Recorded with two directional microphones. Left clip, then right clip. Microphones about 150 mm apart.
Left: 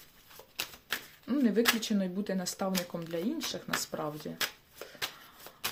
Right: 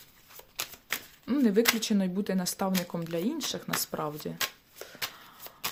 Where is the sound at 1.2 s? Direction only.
30° right (ahead or behind).